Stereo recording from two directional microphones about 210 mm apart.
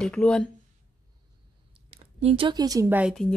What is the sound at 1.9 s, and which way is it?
Speech, 30° right (ahead or behind).